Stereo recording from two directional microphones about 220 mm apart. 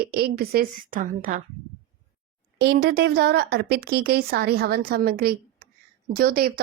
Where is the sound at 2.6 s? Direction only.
50° right (ahead or behind).